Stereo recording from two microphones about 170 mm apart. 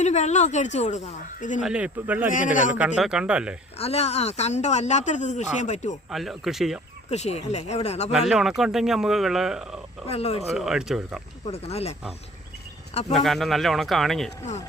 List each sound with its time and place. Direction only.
0.0 s a woman's voice: 40° left (ahead or behind)
1.6 s speech: 5° right (ahead or behind)
2.3 s a woman's voice: 50° left (ahead or behind)
2.7 s speech: 5° right (ahead or behind)
3.8 s speech: 40° left (ahead or behind)
6.1 s speech: centre (ahead or behind)
7.1 s speech: 40° left (ahead or behind)
8.3 s speech: 5° right (ahead or behind)
10.1 s speech: 40° left (ahead or behind)
10.4 s speech: centre (ahead or behind)
11.5 s speech: 35° left (ahead or behind)
13.1 s speech: centre (ahead or behind)